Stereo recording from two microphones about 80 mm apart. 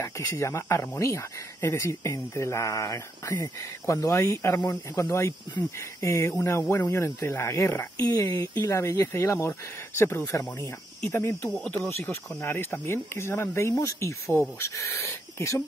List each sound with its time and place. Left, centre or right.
0.0 s speech: left
5.9 s speech: left
8.7 s speech: left
11.5 s speech: centre
12.0 s speech: left